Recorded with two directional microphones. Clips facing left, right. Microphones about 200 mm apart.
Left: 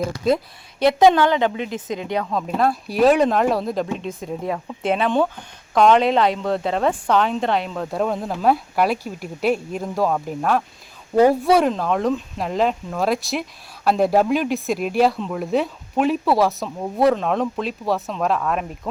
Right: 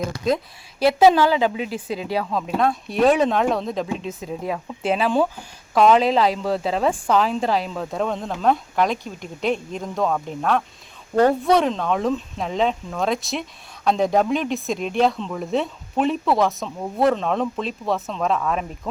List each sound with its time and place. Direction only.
0.3 s speech: centre (ahead or behind)
1.7 s speech: 30° right (ahead or behind)
2.1 s speech: centre (ahead or behind)